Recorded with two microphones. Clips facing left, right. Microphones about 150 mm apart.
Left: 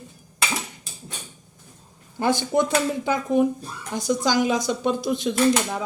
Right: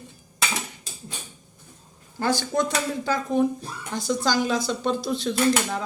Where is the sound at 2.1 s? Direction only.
20° left (ahead or behind).